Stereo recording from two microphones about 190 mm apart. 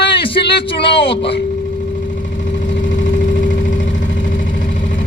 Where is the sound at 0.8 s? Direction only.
60° left (ahead or behind).